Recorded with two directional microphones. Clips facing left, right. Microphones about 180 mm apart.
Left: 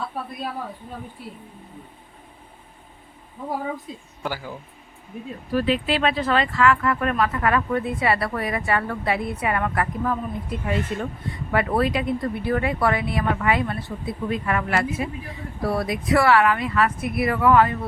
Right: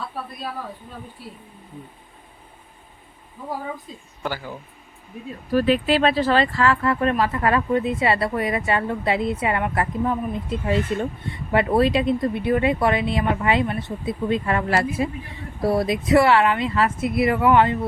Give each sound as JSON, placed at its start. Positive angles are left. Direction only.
{"t": 4.2, "sound": "speech", "side_deg": 10}
{"t": 5.5, "sound": "speech", "side_deg": -45}